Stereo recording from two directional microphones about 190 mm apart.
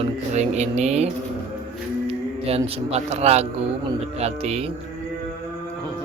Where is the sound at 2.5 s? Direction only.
35° right (ahead or behind).